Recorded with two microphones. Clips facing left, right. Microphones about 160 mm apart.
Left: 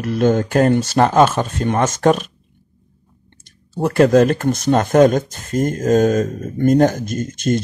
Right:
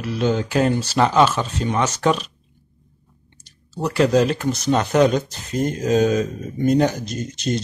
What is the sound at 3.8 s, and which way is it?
Speech, 50° left (ahead or behind).